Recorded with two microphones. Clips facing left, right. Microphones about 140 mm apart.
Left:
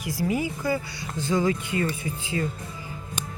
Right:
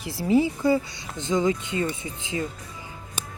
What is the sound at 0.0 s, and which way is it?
Speech, 25° right (ahead or behind).